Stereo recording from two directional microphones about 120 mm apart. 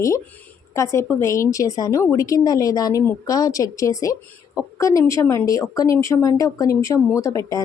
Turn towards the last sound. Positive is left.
turn(degrees=25)  # may be behind; listen again after turning